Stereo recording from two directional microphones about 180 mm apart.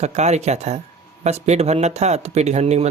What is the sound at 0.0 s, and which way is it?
Speech, 40° right (ahead or behind).